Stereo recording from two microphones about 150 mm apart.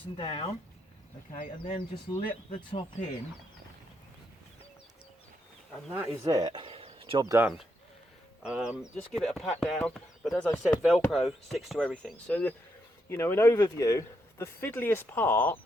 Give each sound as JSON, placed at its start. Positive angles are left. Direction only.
{"t": 0.2, "sound": "speech", "side_deg": 40}
{"t": 1.3, "sound": "speech", "side_deg": 55}
{"t": 6.1, "sound": "speech", "side_deg": -25}
{"t": 7.2, "sound": "speech", "side_deg": -20}
{"t": 8.4, "sound": "speech", "side_deg": -5}
{"t": 10.8, "sound": "speech", "side_deg": -5}